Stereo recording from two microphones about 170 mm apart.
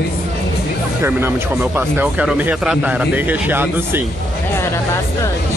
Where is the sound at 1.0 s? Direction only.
15° right (ahead or behind).